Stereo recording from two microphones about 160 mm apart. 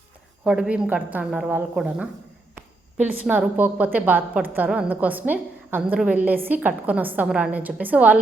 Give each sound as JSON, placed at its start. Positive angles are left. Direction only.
{"t": 0.4, "sound": "a woman's voice", "side_deg": -5}